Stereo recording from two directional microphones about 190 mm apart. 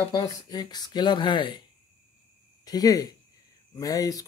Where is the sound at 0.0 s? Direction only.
20° left (ahead or behind).